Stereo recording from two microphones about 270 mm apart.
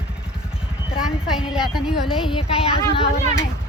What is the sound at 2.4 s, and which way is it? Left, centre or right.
Child singing, left.